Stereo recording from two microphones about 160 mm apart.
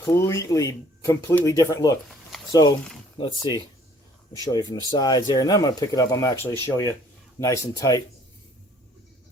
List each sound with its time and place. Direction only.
0.0 s speech: 15° left (ahead or behind)